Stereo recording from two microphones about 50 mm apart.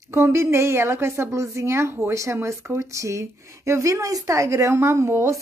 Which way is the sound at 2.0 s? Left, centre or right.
Right.